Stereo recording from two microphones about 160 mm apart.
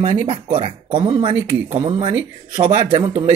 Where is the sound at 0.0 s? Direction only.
30° right (ahead or behind).